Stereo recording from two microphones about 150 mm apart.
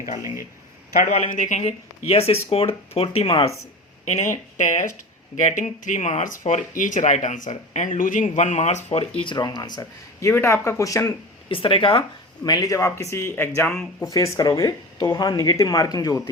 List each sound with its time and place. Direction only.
0.2 s speech: 20° right (ahead or behind)
1.3 s speech: 55° left (ahead or behind)
4.0 s speech: 50° left (ahead or behind); by 11.1 s 20° left (ahead or behind)
11.4 s speech: 35° left (ahead or behind)
12.5 s speech: 25° left (ahead or behind)